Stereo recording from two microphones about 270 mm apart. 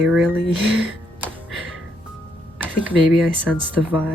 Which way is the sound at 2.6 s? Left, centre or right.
Centre.